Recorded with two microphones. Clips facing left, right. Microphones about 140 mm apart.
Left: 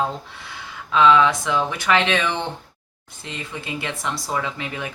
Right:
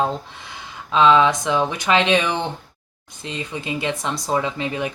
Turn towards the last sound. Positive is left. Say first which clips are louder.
# right 4 dB
turn(degrees=-20)  # may be behind; listen again after turning